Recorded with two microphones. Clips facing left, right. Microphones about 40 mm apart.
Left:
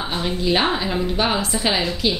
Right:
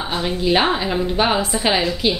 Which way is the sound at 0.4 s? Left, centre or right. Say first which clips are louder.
Right 2 dB; centre.